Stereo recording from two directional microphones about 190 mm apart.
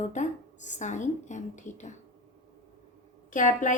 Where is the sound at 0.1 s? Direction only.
40° left (ahead or behind).